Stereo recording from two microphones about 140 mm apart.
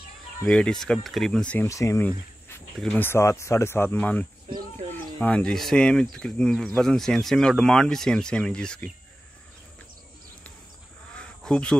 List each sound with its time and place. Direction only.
0.5 s speech: 5° left (ahead or behind)
1.7 s speech: 20° left (ahead or behind); by 8.8 s 5° left (ahead or behind)
11.1 s insect: 5° left (ahead or behind)